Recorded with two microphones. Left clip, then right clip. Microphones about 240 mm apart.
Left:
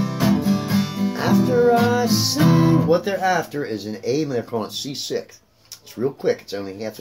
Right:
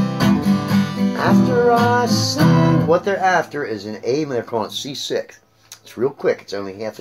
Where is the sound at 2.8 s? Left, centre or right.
Centre.